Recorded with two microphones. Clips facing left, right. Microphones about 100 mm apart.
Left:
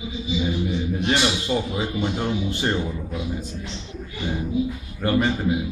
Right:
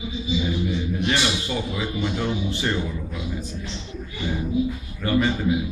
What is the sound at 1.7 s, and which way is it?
A man's voice, 35° left (ahead or behind).